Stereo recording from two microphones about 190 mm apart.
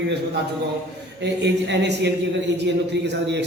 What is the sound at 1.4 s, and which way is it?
A man's voice, 65° right (ahead or behind).